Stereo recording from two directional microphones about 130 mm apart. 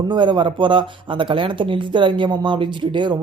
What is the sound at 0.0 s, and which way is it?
Speech, 35° right (ahead or behind).